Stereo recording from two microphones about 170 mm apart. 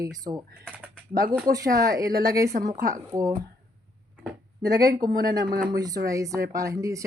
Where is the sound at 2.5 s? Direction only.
50° right (ahead or behind).